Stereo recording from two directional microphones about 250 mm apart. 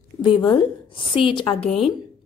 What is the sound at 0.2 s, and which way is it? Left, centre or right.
A woman's voice, centre.